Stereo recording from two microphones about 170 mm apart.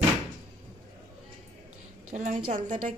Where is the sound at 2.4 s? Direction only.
50° right (ahead or behind).